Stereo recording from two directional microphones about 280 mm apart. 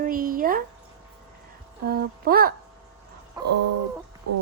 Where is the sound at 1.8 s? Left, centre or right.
Right.